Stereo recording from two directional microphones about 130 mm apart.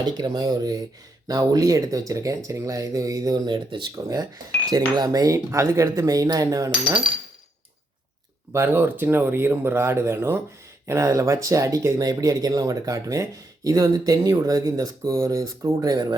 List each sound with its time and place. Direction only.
0.0 s speech: 35° right (ahead or behind)
8.5 s speech: 15° right (ahead or behind); by 16.1 s 30° right (ahead or behind)